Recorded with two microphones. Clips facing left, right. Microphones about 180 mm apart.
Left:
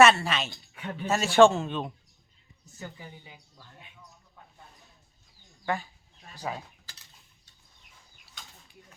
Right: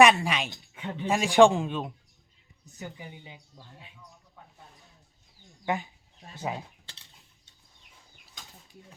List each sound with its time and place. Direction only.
0.0 s speech: 15° right (ahead or behind)
5.6 s speech: 20° right (ahead or behind)
6.2 s cutlery: 20° right (ahead or behind)